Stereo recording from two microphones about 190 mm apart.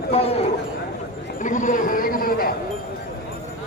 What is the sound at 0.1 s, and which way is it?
Speech, 30° left (ahead or behind).